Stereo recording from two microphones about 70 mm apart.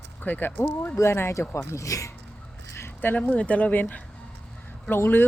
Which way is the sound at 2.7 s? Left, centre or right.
Left.